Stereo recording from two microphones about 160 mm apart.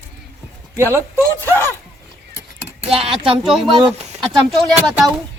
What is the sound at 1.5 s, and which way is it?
Speech, 15° left (ahead or behind).